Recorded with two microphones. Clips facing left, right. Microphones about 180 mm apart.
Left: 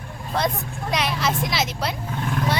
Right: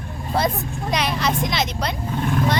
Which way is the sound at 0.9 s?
Centre (ahead or behind).